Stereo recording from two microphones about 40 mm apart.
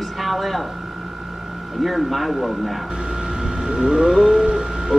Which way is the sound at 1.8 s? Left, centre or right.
Centre.